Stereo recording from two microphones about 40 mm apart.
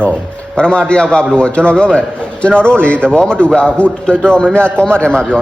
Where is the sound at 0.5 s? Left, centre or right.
Left.